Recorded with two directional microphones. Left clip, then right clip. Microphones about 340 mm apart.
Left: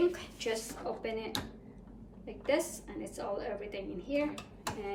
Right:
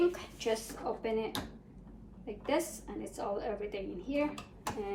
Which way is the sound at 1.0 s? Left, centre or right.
Centre.